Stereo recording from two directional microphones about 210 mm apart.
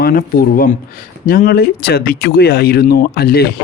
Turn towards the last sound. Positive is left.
turn(degrees=50)  # may be behind; listen again after turning